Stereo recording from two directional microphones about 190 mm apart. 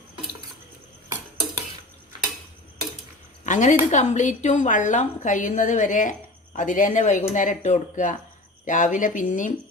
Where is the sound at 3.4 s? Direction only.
40° left (ahead or behind).